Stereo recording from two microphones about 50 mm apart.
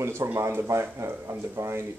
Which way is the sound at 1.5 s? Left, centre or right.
Right.